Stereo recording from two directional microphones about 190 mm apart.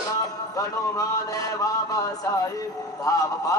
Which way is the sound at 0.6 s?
20° left (ahead or behind).